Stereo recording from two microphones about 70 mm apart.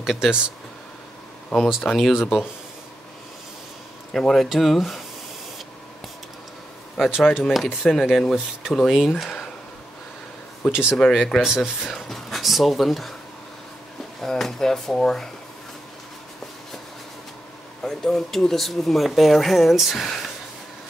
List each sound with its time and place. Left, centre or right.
0.0 s speech: centre
1.5 s speech: centre
4.1 s speech: centre
7.0 s speech: centre
10.7 s speech: centre
11.9 s speech: centre
14.2 s speech: centre
17.8 s speech: centre